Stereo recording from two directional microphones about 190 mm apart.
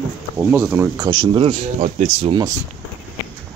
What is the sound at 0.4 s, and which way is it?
Speech, 10° right (ahead or behind).